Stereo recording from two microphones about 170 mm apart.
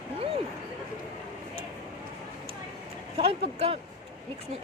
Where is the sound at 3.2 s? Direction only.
35° right (ahead or behind).